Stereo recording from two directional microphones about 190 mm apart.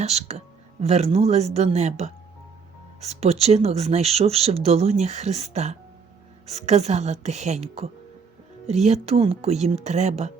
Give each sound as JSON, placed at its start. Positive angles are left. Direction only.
{"t": 0.0, "sound": "speech", "side_deg": -35}